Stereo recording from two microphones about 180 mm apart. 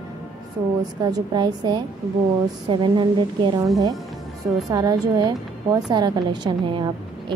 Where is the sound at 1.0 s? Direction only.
25° right (ahead or behind).